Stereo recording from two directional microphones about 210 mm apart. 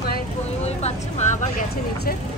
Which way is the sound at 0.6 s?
30° left (ahead or behind).